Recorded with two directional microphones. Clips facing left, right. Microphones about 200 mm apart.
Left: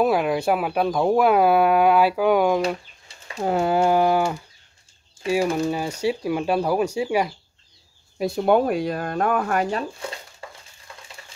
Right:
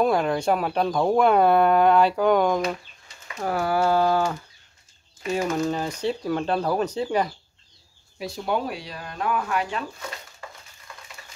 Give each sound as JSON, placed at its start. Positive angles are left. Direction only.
{"t": 0.0, "sound": "speech", "side_deg": 5}
{"t": 3.3, "sound": "speech", "side_deg": 20}
{"t": 8.2, "sound": "speech", "side_deg": 55}
{"t": 10.9, "sound": "a sound", "side_deg": 30}